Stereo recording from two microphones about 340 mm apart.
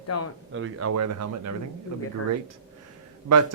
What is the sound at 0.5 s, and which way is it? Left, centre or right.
Speech, right.